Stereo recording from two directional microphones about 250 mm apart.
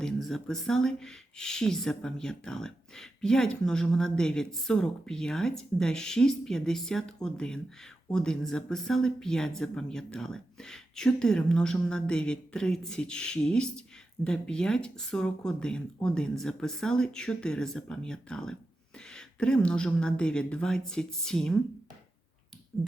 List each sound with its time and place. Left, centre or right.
0.0 s speech: centre